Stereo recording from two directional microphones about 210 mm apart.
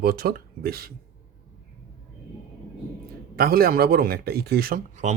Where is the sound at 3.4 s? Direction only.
45° right (ahead or behind).